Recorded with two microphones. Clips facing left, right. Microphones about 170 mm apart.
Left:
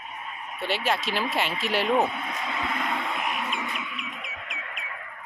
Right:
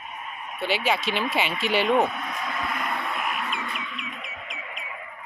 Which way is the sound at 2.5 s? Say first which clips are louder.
Left 1 dB; 25° left (ahead or behind).